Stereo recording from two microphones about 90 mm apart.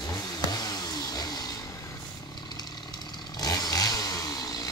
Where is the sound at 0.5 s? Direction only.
45° left (ahead or behind).